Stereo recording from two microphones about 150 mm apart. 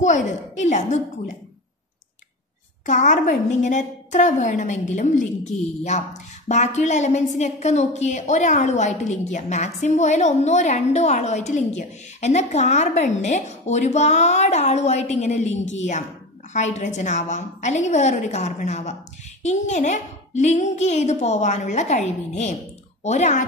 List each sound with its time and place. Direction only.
0.0 s a woman's voice: 55° left (ahead or behind)
2.9 s a woman's voice: 55° left (ahead or behind)